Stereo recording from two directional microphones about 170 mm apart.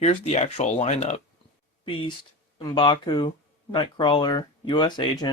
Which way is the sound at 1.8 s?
30° left (ahead or behind).